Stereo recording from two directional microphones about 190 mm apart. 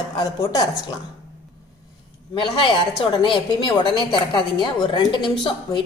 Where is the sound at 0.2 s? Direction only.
20° left (ahead or behind).